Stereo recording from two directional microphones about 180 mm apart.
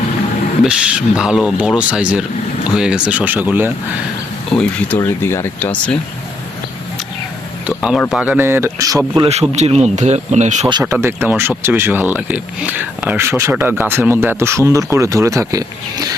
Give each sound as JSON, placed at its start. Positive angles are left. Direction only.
{"t": 0.6, "sound": "speech", "side_deg": -5}
{"t": 4.9, "sound": "speech", "side_deg": 15}
{"t": 7.8, "sound": "speech", "side_deg": -5}
{"t": 9.3, "sound": "speech", "side_deg": -35}
{"t": 10.7, "sound": "speech", "side_deg": -25}
{"t": 10.9, "sound": "speech", "side_deg": -10}